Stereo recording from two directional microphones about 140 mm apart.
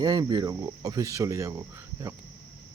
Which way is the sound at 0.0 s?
30° right (ahead or behind).